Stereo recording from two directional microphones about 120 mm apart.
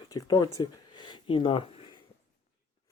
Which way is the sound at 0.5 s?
40° left (ahead or behind).